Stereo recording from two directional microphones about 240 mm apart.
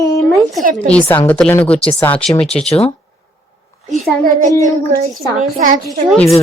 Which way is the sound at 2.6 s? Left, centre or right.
Left.